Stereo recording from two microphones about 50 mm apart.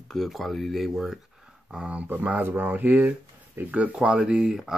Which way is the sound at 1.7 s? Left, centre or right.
Right.